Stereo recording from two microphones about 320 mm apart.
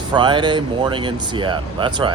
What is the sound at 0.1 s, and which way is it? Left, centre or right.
Speech, centre.